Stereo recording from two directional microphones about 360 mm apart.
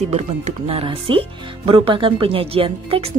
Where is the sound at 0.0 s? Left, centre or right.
Centre.